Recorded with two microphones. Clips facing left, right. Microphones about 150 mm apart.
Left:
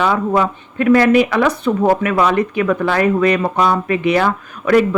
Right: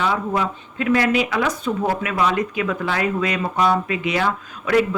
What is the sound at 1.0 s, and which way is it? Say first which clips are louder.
A woman's voice: left 7 dB; 65° left (ahead or behind).